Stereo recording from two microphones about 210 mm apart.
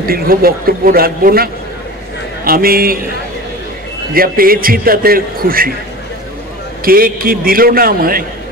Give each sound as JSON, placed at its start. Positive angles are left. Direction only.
{"t": 0.0, "sound": "a man's voice", "side_deg": -45}
{"t": 4.1, "sound": "a man's voice", "side_deg": -45}
{"t": 6.8, "sound": "a man's voice", "side_deg": -45}